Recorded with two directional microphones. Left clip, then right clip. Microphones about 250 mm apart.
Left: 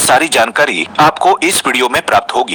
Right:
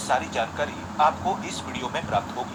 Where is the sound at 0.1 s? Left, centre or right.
Left.